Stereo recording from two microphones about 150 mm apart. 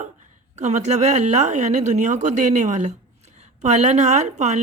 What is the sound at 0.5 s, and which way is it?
Speech, 50° right (ahead or behind).